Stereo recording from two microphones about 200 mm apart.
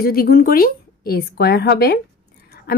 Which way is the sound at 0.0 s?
50° left (ahead or behind).